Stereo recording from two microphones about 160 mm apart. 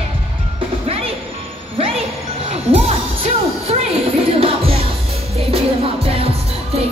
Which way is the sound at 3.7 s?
40° right (ahead or behind).